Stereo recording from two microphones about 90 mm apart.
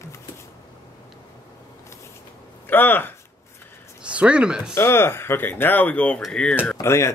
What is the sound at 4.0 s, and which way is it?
Speech, 15° right (ahead or behind).